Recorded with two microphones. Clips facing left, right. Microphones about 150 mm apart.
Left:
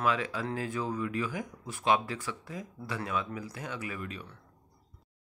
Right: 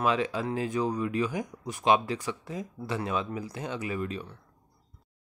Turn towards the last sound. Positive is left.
turn(degrees=-30)  # may be behind; listen again after turning